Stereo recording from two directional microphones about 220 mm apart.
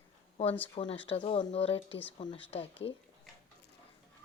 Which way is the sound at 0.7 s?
25° left (ahead or behind).